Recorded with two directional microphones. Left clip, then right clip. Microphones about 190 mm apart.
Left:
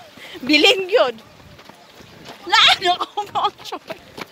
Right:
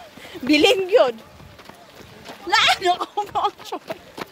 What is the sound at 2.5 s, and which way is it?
Sheep, centre (ahead or behind).